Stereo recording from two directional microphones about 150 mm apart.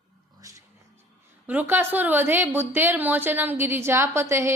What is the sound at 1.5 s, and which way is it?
A woman's voice, 10° right (ahead or behind).